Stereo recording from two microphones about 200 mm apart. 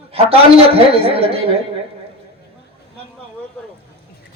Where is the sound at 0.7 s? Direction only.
30° right (ahead or behind).